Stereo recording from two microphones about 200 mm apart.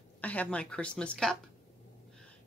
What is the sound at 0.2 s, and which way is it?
A woman's voice, 5° left (ahead or behind).